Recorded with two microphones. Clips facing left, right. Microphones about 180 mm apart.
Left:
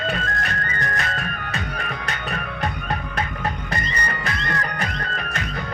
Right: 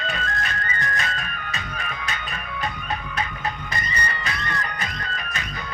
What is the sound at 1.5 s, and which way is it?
Music, 60° left (ahead or behind).